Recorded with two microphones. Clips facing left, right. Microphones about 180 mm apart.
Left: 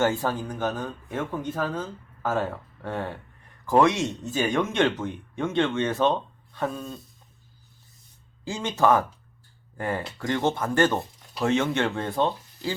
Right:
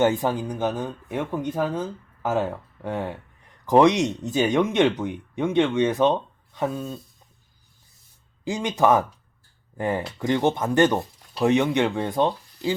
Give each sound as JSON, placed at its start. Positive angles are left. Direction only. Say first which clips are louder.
{"t": 0.0, "sound": "speech", "louder": "right 3 dB", "side_deg": -15}
{"t": 8.4, "sound": "speech", "louder": "right 2 dB", "side_deg": -15}